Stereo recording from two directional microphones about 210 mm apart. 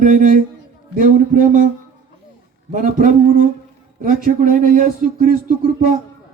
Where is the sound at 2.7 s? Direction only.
40° right (ahead or behind).